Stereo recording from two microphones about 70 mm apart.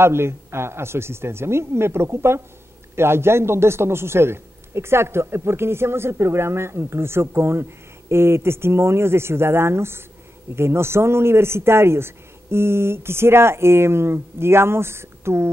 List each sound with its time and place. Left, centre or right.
0.0 s speech: right